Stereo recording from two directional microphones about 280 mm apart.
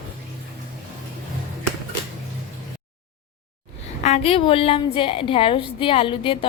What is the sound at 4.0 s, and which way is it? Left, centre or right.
A woman's voice, left.